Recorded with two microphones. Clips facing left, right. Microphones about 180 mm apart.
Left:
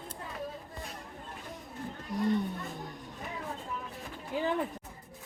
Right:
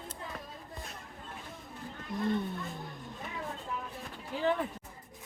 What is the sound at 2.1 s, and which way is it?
Speech, 10° left (ahead or behind).